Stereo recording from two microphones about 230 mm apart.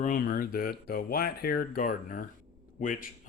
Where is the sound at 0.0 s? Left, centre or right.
Left.